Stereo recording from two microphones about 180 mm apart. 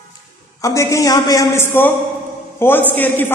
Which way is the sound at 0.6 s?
15° left (ahead or behind).